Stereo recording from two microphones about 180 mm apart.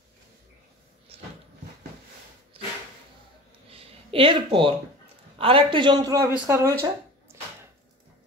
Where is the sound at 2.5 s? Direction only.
30° right (ahead or behind).